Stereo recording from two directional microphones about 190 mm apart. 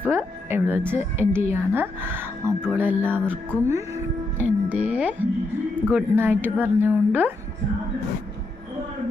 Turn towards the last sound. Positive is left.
turn(degrees=-10)  # may be behind; listen again after turning